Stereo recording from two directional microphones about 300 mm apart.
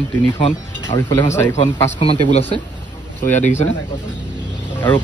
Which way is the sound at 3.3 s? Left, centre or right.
Left.